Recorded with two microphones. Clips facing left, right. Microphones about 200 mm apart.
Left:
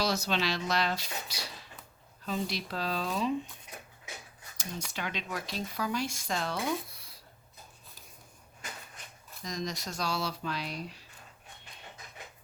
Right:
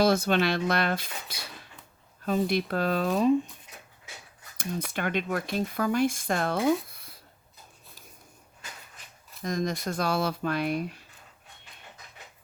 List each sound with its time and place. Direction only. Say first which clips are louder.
0.0 s speech: right 8 dB; 55° right (ahead or behind)
4.5 s speech: right 7 dB; 55° right (ahead or behind)
9.4 s speech: right 7 dB; 55° right (ahead or behind)